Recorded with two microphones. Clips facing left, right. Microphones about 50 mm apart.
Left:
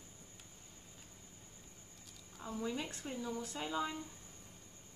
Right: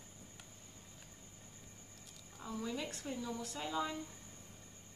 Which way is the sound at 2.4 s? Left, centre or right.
Centre.